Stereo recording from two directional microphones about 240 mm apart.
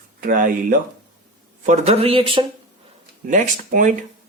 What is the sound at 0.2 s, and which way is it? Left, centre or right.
Speech, right.